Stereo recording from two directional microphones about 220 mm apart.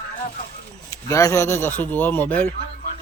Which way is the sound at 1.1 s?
15° left (ahead or behind).